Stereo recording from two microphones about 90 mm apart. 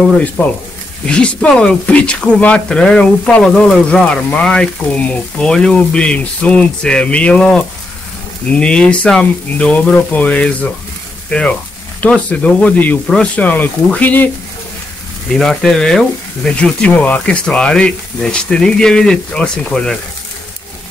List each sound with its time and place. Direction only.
0.0 s speech: 15° left (ahead or behind)
15.3 s speech: 5° left (ahead or behind)